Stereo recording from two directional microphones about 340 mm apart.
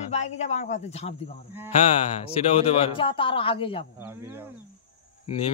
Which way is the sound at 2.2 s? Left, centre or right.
Centre.